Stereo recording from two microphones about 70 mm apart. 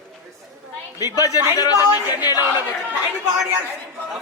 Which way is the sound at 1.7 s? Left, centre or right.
Right.